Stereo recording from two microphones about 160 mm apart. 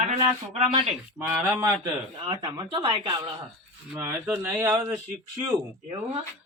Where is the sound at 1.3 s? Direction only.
15° right (ahead or behind).